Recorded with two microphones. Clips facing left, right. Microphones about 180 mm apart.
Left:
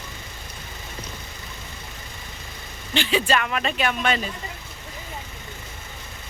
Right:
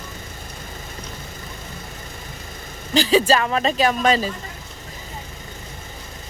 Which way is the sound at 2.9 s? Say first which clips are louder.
Right 6 dB; 35° right (ahead or behind).